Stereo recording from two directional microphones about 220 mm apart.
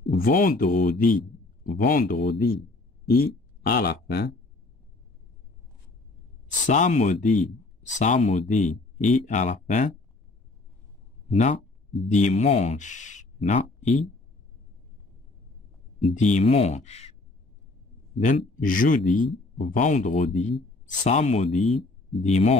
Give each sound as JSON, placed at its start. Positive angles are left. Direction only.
{"t": 0.0, "sound": "a man's voice", "side_deg": 40}
{"t": 6.7, "sound": "speech", "side_deg": 35}
{"t": 11.2, "sound": "speech", "side_deg": 30}
{"t": 16.0, "sound": "speech", "side_deg": 30}
{"t": 18.1, "sound": "speech", "side_deg": 35}